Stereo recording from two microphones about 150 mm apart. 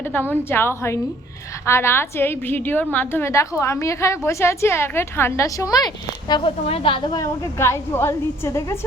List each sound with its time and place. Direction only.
0.0 s a woman's voice: 15° left (ahead or behind); by 7.3 s 30° left (ahead or behind)
7.6 s a woman's voice: 15° left (ahead or behind)